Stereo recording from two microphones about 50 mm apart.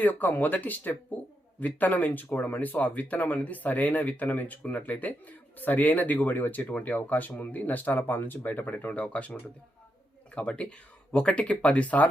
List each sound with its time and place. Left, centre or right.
0.0 s speech: left
8.9 s speech: left